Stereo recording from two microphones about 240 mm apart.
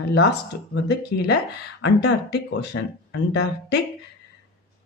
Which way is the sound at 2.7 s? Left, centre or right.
Left.